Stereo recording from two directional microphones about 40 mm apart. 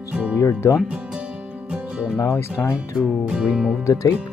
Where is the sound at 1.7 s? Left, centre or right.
Right.